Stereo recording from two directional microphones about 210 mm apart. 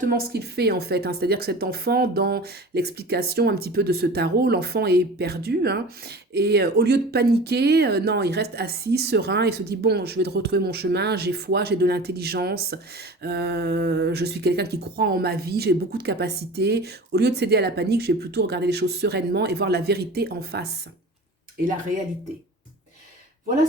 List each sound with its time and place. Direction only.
0.0 s speech: 45° right (ahead or behind)